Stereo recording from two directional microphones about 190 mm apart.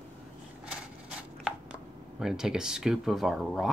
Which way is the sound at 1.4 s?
Centre (ahead or behind).